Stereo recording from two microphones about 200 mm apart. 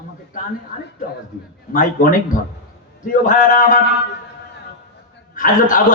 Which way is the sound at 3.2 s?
40° left (ahead or behind).